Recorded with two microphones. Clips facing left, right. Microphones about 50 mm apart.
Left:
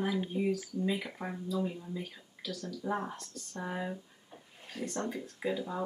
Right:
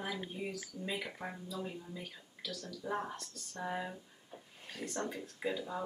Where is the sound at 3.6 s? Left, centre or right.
Centre.